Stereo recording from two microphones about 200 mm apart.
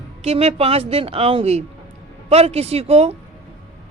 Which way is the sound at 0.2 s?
30° right (ahead or behind).